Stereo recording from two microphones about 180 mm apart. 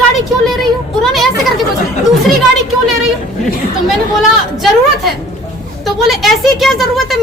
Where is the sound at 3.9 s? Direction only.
Centre (ahead or behind).